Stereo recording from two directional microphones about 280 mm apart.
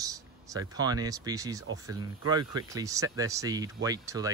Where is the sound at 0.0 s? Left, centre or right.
Centre.